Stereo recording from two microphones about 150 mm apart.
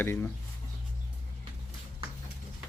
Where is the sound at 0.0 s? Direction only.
15° left (ahead or behind).